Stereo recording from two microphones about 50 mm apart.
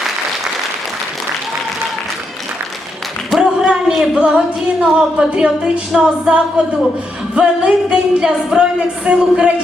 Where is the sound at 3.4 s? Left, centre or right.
Centre.